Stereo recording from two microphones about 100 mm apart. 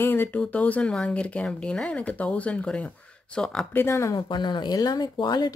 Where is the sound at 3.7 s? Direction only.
25° left (ahead or behind).